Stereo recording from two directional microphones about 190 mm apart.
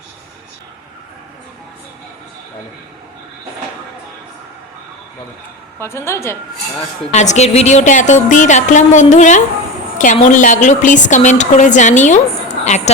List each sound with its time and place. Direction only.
5.8 s a woman's voice: 15° left (ahead or behind)
7.1 s a woman's voice: 35° left (ahead or behind)